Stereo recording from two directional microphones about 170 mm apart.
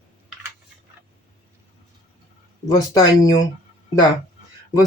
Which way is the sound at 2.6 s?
20° left (ahead or behind).